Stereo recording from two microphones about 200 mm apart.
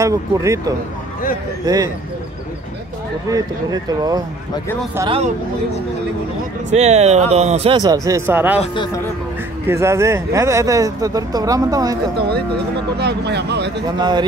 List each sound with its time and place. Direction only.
0.0 s speech: 15° right (ahead or behind)
3.3 s speech: 15° right (ahead or behind)
6.7 s speech: 35° right (ahead or behind); by 8.5 s 10° right (ahead or behind)
9.7 s speech: 15° right (ahead or behind)
12.2 s speech: 50° right (ahead or behind)
13.9 s a man's voice: 20° right (ahead or behind)